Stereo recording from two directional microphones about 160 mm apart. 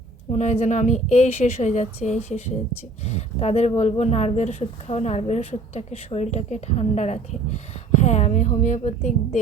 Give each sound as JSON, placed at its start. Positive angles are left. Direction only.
{"t": 0.3, "sound": "speech", "side_deg": 45}